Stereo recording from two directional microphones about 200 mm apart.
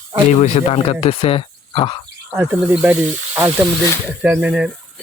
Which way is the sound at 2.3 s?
10° right (ahead or behind).